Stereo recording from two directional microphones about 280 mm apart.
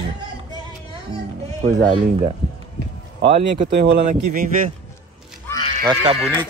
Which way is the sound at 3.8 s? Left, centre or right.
Right.